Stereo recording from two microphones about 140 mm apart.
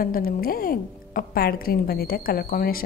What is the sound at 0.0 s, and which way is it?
Speech, 90° left.